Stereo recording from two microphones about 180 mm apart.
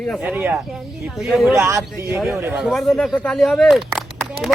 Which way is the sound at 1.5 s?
15° right (ahead or behind).